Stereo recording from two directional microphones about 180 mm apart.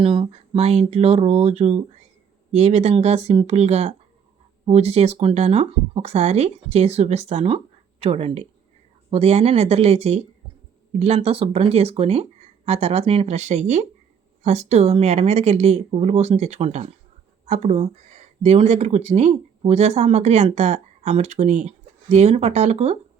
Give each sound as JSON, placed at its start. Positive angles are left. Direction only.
{"t": 0.0, "sound": "speech", "side_deg": -30}